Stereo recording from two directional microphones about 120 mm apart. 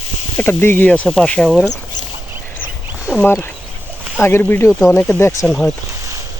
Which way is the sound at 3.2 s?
15° left (ahead or behind).